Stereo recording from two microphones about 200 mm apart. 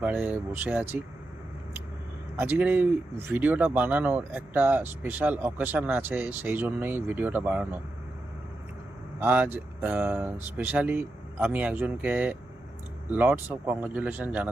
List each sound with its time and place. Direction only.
0.0 s speech: 10° right (ahead or behind)
2.3 s speech: 10° right (ahead or behind)
9.2 s speech: 10° right (ahead or behind)